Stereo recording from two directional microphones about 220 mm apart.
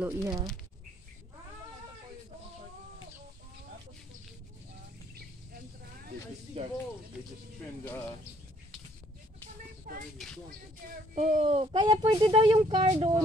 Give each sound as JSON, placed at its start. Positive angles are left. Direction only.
{"t": 0.0, "sound": "speech", "side_deg": -15}
{"t": 6.5, "sound": "speech", "side_deg": -25}
{"t": 9.9, "sound": "a sound", "side_deg": -40}
{"t": 11.1, "sound": "speech", "side_deg": -30}